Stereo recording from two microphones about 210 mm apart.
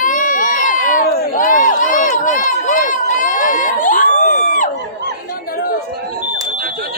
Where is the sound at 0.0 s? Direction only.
40° left (ahead or behind).